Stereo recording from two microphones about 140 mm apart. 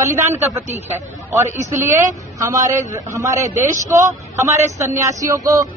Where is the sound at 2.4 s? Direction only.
20° right (ahead or behind).